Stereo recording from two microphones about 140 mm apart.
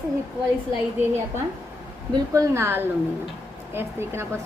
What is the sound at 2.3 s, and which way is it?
A woman's voice, 20° right (ahead or behind).